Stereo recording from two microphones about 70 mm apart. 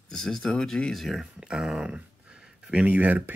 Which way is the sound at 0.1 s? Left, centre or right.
Centre.